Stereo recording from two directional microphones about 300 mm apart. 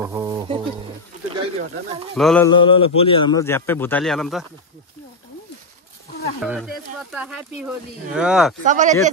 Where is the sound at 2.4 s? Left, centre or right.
Centre.